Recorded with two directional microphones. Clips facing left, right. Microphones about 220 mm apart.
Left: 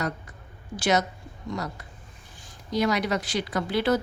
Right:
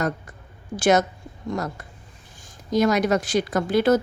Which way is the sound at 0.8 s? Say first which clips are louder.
Right 5 dB; 50° right (ahead or behind).